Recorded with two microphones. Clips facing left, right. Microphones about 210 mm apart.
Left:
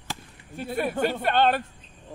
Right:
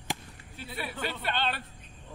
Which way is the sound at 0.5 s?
50° left (ahead or behind).